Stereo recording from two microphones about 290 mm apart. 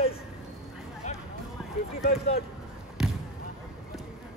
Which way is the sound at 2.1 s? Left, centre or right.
Left.